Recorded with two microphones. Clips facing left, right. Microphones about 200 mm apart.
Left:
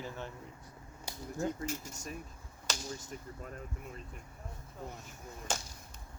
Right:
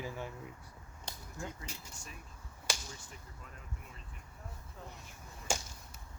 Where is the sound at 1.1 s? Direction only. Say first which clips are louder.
Left 3 dB; 10° left (ahead or behind).